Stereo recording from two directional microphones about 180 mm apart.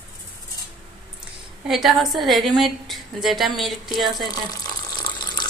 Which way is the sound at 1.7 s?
Centre (ahead or behind).